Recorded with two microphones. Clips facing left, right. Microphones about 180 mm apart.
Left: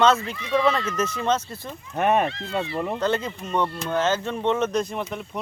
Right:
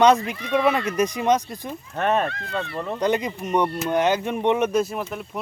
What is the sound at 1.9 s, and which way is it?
Speech, 15° left (ahead or behind).